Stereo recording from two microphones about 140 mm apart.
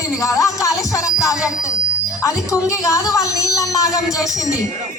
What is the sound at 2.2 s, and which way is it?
A woman's voice, 20° left (ahead or behind).